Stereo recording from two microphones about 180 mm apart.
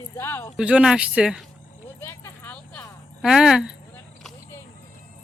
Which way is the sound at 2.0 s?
15° left (ahead or behind).